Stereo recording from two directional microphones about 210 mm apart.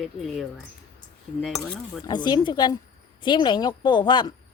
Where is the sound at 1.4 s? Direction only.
Centre (ahead or behind).